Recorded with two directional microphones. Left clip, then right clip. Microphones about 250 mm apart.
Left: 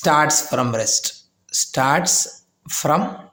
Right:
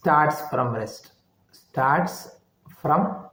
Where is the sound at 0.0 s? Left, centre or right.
Left.